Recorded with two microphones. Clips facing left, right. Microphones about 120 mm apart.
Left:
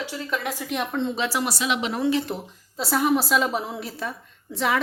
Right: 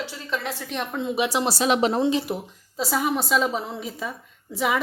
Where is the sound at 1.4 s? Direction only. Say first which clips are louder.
Right 5 dB; 35° right (ahead or behind).